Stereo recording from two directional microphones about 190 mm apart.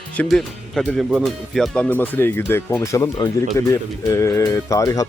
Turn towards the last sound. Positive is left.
turn(degrees=15)  # may be behind; listen again after turning